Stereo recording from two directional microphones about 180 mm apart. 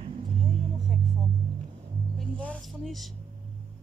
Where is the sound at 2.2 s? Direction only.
5° left (ahead or behind).